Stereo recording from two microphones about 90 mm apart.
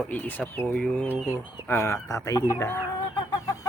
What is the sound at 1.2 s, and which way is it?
Speech, 30° left (ahead or behind).